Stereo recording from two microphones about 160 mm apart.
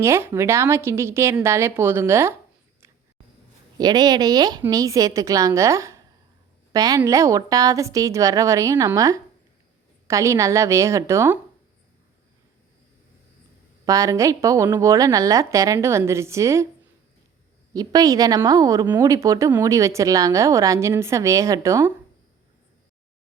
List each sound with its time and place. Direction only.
0.0 s a woman's voice: 15° right (ahead or behind)
3.8 s speech: 25° right (ahead or behind)
13.8 s speech: 20° right (ahead or behind)
17.7 s speech: 25° right (ahead or behind)